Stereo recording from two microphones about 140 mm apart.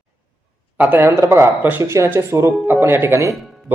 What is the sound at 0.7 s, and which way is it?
Speech, 10° right (ahead or behind).